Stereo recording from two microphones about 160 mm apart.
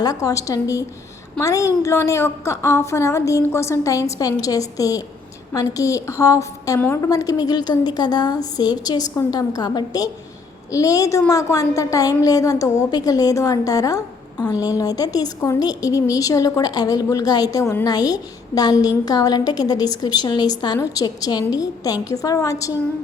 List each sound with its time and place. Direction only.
0.0 s a woman's voice: 20° left (ahead or behind)